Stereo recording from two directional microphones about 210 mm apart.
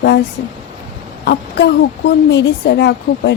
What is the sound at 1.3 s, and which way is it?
A woman's voice, 55° left (ahead or behind).